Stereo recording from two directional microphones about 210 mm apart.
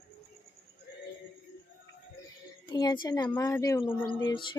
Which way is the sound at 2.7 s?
20° left (ahead or behind).